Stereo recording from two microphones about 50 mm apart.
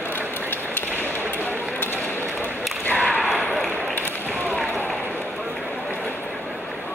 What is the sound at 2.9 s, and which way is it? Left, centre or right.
Whip, left.